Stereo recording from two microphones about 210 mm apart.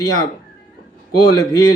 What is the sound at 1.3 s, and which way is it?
Speech, 15° left (ahead or behind).